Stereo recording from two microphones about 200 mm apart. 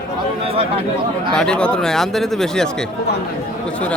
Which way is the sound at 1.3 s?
5° left (ahead or behind).